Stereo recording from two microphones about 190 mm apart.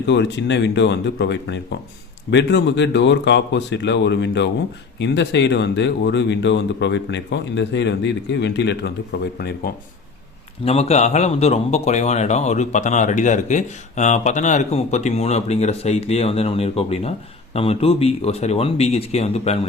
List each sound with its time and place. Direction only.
0.0 s speech: 65° left (ahead or behind)
10.7 s a man's voice: 35° left (ahead or behind)